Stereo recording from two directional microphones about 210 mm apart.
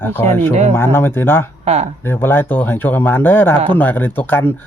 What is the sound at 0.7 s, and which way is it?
Speech, 10° left (ahead or behind).